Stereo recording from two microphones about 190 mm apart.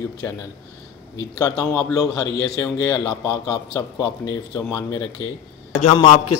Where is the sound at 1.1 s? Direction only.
20° left (ahead or behind).